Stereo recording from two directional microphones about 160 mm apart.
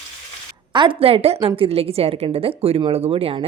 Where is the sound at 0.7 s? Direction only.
30° right (ahead or behind).